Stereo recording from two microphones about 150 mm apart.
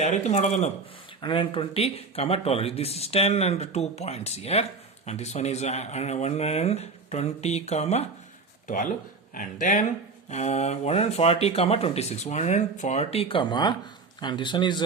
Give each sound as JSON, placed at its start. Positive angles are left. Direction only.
{"t": 0.0, "sound": "speech", "side_deg": 50}
{"t": 1.2, "sound": "speech", "side_deg": 35}
{"t": 8.6, "sound": "a man's voice", "side_deg": 60}